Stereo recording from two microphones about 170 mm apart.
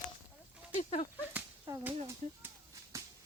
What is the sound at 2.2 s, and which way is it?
Speech, 45° right (ahead or behind).